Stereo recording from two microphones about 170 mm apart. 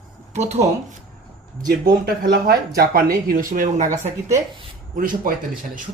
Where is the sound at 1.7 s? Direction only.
65° right (ahead or behind).